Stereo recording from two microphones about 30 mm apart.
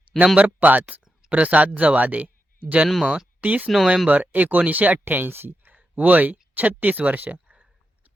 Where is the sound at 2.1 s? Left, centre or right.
Right.